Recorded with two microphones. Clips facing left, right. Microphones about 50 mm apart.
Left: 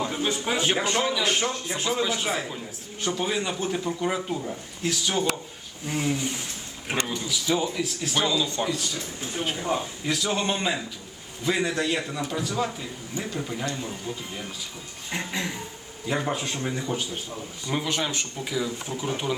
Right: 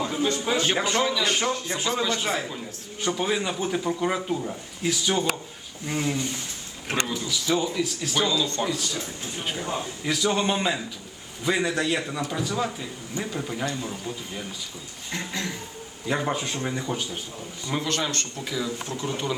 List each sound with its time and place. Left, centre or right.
0.0 s a man's voice: centre
15.1 s speech: centre
16.0 s speech: centre